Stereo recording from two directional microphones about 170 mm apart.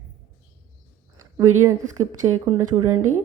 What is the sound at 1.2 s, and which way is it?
A woman's voice, 20° right (ahead or behind).